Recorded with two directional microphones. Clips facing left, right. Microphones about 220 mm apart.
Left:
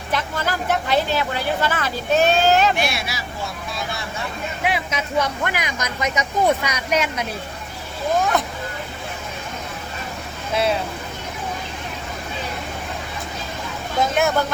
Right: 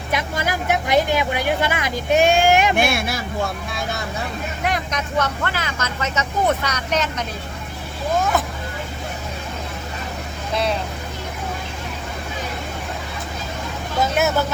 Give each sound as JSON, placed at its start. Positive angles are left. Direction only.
{"t": 0.1, "sound": "a woman's voice", "side_deg": -10}
{"t": 2.7, "sound": "speech", "side_deg": -50}
{"t": 4.6, "sound": "speech", "side_deg": 5}
{"t": 8.2, "sound": "speech", "side_deg": 0}
{"t": 10.5, "sound": "speech", "side_deg": 5}
{"t": 14.0, "sound": "speech", "side_deg": -5}